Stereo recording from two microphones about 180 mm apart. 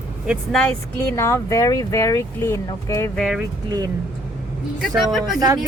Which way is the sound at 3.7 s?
20° right (ahead or behind).